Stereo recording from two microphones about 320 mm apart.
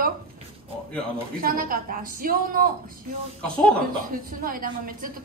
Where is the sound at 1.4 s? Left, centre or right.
Right.